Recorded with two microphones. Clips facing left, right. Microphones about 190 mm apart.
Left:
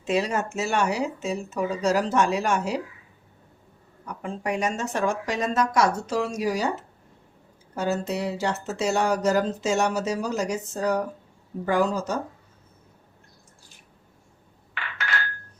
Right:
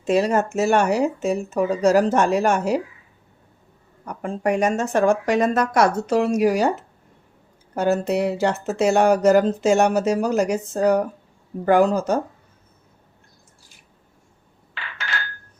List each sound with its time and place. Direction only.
0.0 s speech: 45° right (ahead or behind)
4.0 s speech: 50° right (ahead or behind)
7.8 s speech: 60° right (ahead or behind)